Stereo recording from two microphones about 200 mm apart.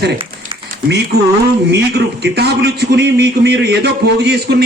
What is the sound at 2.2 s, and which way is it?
A man's voice, 55° right (ahead or behind).